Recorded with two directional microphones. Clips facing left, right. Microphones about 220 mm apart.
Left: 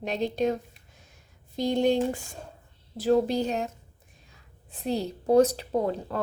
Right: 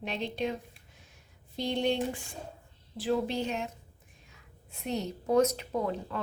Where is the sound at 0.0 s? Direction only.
40° left (ahead or behind).